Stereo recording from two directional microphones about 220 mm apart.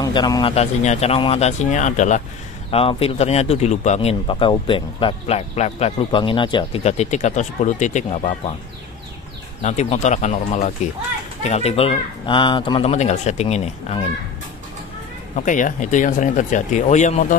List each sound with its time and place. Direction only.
0.0 s speech: 20° left (ahead or behind)
9.6 s speech: 30° left (ahead or behind)
15.3 s speech: 35° left (ahead or behind)